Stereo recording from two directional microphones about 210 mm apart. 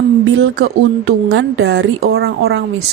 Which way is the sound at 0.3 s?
65° right (ahead or behind).